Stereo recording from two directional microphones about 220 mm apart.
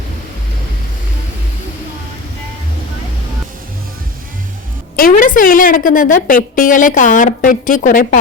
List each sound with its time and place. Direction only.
4.9 s a woman's voice: 40° left (ahead or behind)